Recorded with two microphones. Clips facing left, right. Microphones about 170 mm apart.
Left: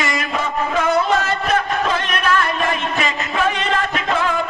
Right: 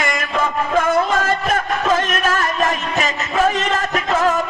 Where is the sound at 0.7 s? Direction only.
50° right (ahead or behind).